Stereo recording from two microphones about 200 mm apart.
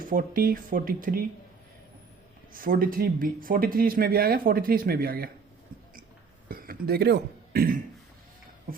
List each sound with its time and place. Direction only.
0.0 s speech: 45° right (ahead or behind)
2.5 s speech: 45° right (ahead or behind)
6.5 s throat clearing: 50° right (ahead or behind)